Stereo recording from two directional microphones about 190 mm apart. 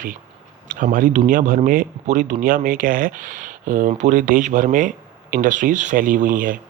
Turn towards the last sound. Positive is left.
turn(degrees=-45)  # may be behind; listen again after turning